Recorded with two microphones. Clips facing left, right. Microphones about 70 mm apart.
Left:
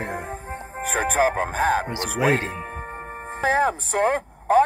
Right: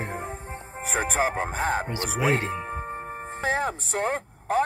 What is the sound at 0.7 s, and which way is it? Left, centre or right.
Music, left.